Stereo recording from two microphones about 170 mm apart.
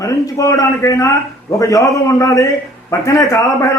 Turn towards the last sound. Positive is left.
turn(degrees=20)  # may be behind; listen again after turning